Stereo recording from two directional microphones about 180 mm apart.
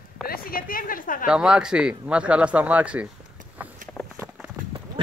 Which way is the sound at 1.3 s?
5° right (ahead or behind).